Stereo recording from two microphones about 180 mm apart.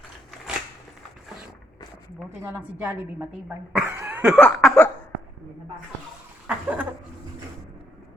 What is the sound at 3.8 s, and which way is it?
Cough, 10° right (ahead or behind).